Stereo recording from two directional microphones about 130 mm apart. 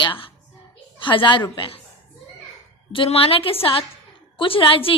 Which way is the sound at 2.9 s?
45° left (ahead or behind).